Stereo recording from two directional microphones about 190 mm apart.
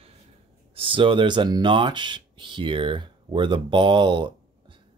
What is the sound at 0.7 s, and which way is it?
Speech, 25° right (ahead or behind).